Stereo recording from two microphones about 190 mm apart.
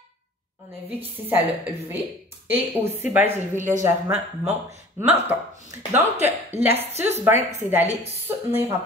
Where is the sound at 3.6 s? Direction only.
40° right (ahead or behind).